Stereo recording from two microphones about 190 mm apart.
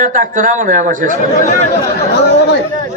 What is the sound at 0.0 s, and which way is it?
A man's voice, 45° right (ahead or behind).